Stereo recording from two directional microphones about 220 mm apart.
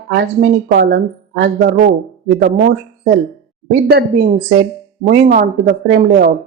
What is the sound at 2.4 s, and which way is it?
Speech, 45° right (ahead or behind).